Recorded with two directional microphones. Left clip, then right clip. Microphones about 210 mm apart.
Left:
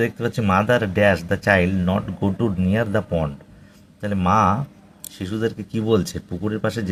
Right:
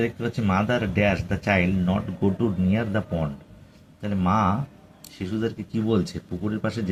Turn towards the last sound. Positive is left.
turn(degrees=55)  # may be behind; listen again after turning